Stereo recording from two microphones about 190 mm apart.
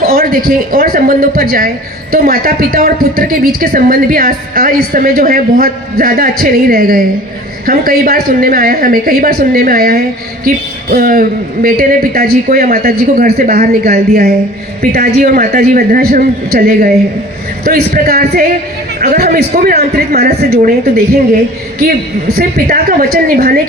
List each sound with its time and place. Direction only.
0.1 s speech: 50° right (ahead or behind)